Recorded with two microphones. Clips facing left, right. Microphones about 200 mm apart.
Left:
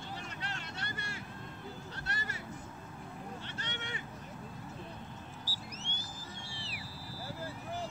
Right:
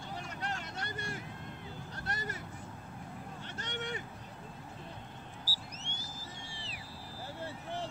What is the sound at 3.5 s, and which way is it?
Vehicle, 45° right (ahead or behind).